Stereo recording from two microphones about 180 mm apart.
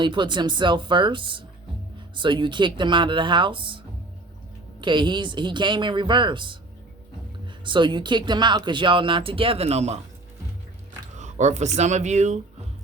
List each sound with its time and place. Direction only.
0.0 s speech: 25° right (ahead or behind)
4.8 s speech: 25° right (ahead or behind)
11.2 s speech: 40° right (ahead or behind)